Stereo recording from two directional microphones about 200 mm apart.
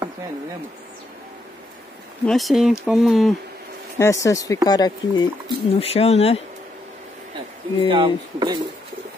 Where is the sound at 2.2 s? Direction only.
Centre (ahead or behind).